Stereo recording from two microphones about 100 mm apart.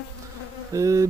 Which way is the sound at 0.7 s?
35° right (ahead or behind).